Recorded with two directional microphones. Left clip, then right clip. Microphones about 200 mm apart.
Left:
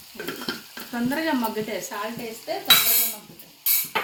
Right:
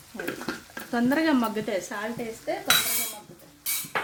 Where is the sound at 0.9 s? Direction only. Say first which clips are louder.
Right 2 dB; 55° right (ahead or behind).